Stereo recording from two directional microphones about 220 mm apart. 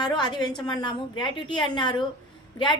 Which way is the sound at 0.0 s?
20° left (ahead or behind).